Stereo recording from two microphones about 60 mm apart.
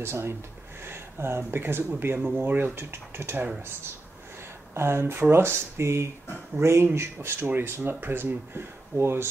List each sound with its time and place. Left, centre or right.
0.0 s speech: right
4.7 s speech: right